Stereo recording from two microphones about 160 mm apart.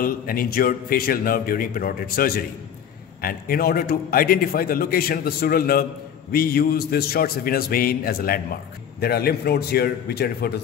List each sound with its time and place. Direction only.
0.0 s a man's voice: 65° left (ahead or behind)